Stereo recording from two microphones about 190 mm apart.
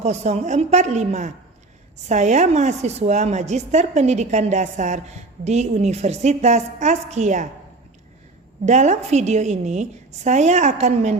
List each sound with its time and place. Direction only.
0.0 s speech: 35° right (ahead or behind)
8.6 s speech: 35° right (ahead or behind)